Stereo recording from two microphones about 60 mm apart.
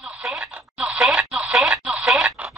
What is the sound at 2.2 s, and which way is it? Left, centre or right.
Radio, centre.